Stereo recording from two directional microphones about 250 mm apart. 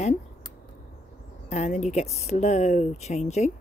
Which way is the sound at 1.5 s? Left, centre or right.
Left.